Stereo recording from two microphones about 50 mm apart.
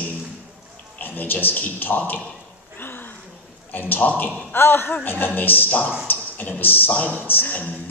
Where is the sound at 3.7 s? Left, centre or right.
Left.